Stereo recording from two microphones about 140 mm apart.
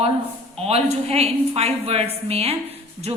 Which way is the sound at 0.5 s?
45° right (ahead or behind).